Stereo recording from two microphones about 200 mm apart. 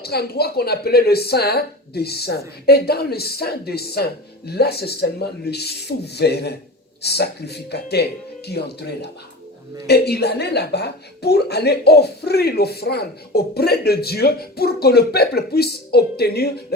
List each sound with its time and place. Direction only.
0.0 s a woman's voice: 50° left (ahead or behind)